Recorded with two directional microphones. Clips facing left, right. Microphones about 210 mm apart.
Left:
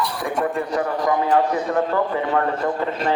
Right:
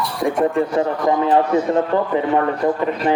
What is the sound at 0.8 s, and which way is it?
A man's voice, 25° right (ahead or behind).